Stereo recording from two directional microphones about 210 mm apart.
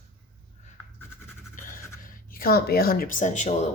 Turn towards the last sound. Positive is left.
turn(degrees=35)  # may be behind; listen again after turning